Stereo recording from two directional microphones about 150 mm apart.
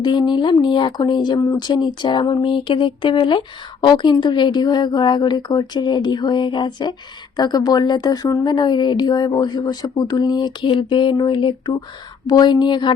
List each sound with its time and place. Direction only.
0.0 s speech: 30° left (ahead or behind)